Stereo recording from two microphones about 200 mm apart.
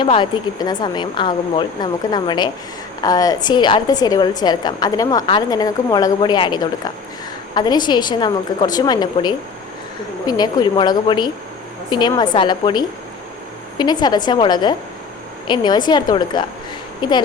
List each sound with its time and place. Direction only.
0.0 s a woman's voice: 25° left (ahead or behind)